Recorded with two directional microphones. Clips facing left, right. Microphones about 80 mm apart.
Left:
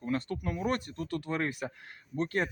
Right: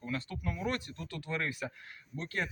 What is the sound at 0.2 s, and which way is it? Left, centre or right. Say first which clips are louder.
Speech: left 4 dB; left.